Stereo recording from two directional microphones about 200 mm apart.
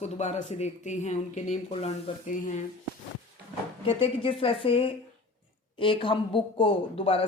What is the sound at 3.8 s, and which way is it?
Speech, 25° left (ahead or behind).